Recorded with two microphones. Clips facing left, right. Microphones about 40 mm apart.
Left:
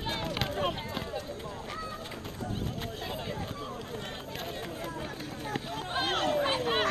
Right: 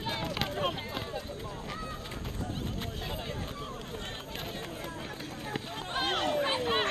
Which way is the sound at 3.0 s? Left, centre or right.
Centre.